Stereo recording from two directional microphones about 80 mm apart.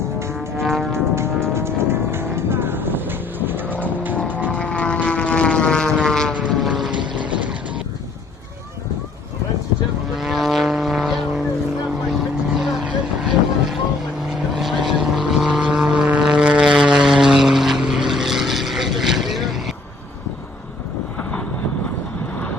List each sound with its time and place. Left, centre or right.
0.6 s music: centre
0.9 s vehicle: right
4.4 s vehicle: centre
6.9 s vehicle: right
10.2 s vehicle: centre
12.5 s vehicle: centre